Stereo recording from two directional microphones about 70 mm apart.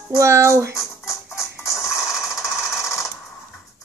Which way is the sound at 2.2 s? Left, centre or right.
Left.